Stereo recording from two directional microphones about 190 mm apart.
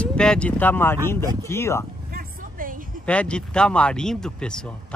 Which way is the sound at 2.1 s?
50° right (ahead or behind).